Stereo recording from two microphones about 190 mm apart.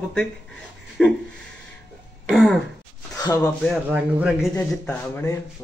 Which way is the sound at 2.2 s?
5° left (ahead or behind).